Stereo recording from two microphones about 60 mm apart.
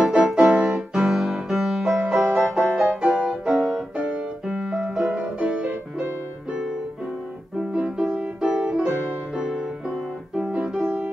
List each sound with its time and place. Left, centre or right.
0.0 s music: centre
4.7 s music: centre